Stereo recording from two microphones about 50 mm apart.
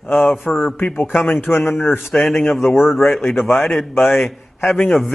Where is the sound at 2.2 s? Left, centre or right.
Centre.